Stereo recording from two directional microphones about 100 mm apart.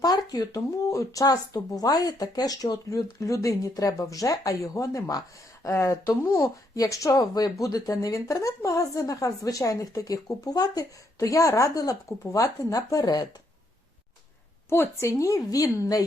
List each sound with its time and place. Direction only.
0.0 s speech: 40° left (ahead or behind)
14.7 s speech: 25° left (ahead or behind)